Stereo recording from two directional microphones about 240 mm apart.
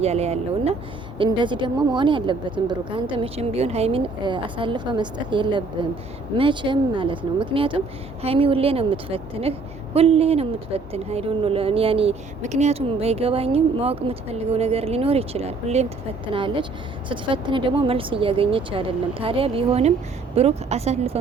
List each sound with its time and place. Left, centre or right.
0.0 s a woman's voice: right